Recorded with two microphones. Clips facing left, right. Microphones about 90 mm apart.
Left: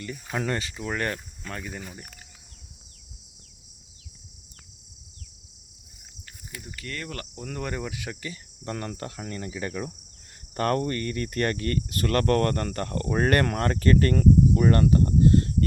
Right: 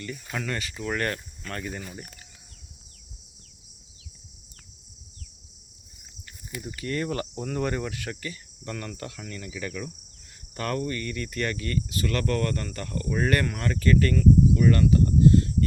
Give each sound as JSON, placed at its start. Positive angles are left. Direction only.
{"t": 0.0, "sound": "speech", "side_deg": 15}
{"t": 0.4, "sound": "speech", "side_deg": 30}
{"t": 6.7, "sound": "cricket", "side_deg": -20}
{"t": 7.3, "sound": "speech", "side_deg": -5}
{"t": 7.9, "sound": "speech", "side_deg": 10}
{"t": 8.6, "sound": "cricket", "side_deg": 30}
{"t": 10.5, "sound": "speech", "side_deg": 45}